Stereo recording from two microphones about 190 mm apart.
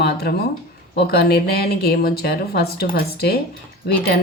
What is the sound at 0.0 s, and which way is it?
Speech, 55° left (ahead or behind).